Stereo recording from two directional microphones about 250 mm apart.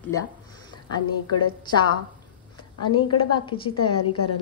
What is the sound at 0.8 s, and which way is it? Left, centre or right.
Speech, centre.